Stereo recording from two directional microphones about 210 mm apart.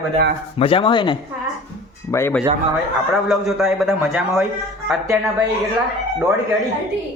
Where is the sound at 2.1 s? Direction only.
10° left (ahead or behind).